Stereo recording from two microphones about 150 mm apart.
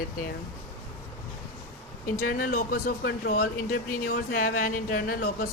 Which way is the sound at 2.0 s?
70° left (ahead or behind).